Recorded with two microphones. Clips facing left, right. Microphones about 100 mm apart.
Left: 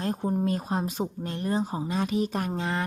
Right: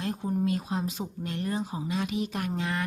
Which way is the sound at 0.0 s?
40° left (ahead or behind).